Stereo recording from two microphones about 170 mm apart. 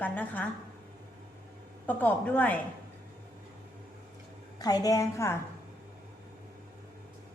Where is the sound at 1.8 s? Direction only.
10° left (ahead or behind).